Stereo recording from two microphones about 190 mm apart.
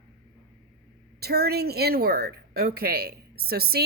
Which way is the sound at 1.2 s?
55° right (ahead or behind).